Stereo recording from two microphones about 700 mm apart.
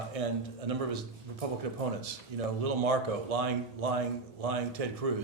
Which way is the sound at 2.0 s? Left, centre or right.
Right.